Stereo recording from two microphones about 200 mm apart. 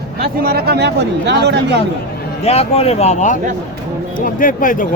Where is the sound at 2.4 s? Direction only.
30° left (ahead or behind).